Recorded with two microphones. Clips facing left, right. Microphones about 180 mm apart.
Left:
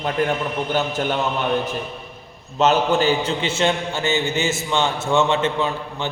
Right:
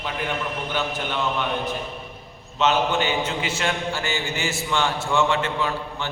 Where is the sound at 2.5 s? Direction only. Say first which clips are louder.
Left 4 dB; 40° left (ahead or behind).